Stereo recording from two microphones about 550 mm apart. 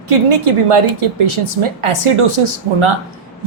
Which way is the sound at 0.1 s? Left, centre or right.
Right.